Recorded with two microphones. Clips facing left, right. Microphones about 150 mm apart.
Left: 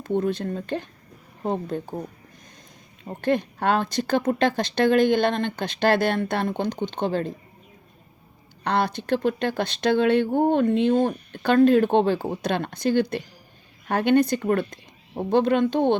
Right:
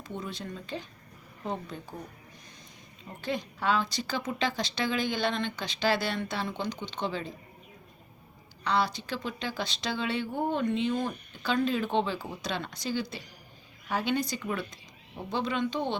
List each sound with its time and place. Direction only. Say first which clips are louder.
0.0 s speech: left 14 dB; 55° left (ahead or behind)
8.6 s speech: left 5 dB; 55° left (ahead or behind)